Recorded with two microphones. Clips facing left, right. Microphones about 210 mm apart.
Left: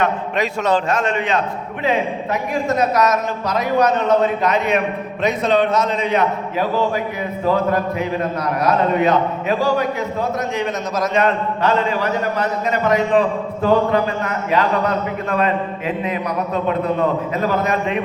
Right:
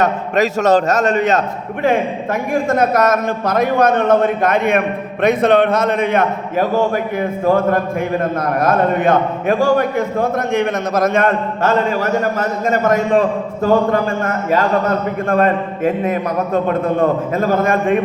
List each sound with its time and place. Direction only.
0.0 s a man's voice: 45° right (ahead or behind)